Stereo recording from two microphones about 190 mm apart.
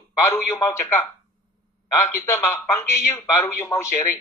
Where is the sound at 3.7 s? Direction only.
20° left (ahead or behind).